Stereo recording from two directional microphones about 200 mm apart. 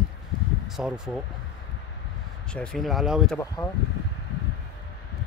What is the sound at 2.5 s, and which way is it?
Speech, 5° left (ahead or behind).